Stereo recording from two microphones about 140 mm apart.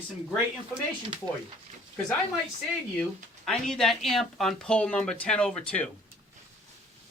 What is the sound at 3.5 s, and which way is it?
Speech, 5° left (ahead or behind).